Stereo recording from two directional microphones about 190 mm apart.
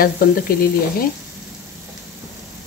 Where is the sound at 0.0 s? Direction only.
50° left (ahead or behind).